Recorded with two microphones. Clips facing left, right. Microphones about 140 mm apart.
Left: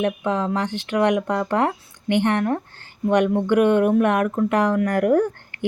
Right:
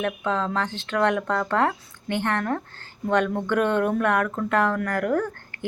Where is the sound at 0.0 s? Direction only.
15° left (ahead or behind).